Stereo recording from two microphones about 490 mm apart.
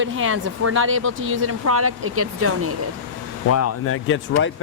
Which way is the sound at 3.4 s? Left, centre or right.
Left.